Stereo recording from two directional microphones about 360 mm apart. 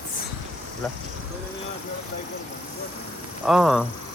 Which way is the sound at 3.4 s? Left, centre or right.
Centre.